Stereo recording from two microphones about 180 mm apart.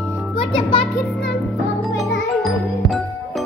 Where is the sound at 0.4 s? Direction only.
30° left (ahead or behind).